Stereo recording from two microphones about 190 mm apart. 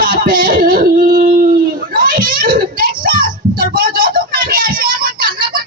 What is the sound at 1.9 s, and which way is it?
Children playing, 45° right (ahead or behind).